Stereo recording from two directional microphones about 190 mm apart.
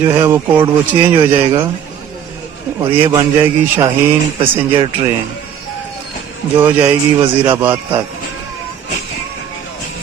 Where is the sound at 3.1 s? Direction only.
15° right (ahead or behind).